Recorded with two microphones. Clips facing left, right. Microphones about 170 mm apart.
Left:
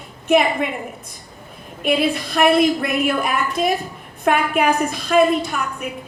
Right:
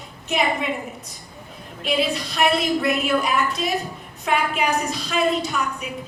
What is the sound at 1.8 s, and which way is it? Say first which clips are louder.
A woman's voice: left 4 dB; 55° left (ahead or behind).